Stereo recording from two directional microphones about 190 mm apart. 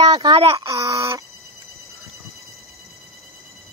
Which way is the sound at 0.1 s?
20° right (ahead or behind).